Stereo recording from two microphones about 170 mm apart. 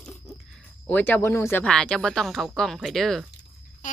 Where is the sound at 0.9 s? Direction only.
10° left (ahead or behind).